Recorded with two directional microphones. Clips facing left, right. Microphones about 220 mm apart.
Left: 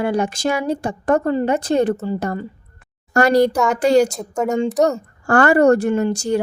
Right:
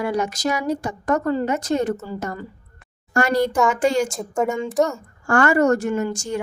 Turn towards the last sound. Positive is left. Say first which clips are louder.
# left 5 dB
turn(degrees=35)  # may be behind; listen again after turning